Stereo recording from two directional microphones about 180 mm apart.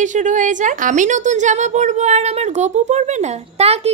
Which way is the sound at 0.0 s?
45° right (ahead or behind).